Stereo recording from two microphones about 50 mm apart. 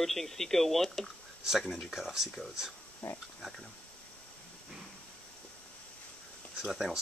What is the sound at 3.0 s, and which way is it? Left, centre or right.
Speech, left.